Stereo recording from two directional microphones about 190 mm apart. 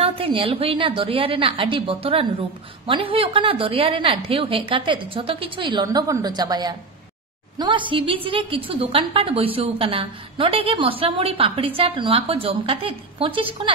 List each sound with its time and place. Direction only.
0.0 s a woman's voice: 30° right (ahead or behind)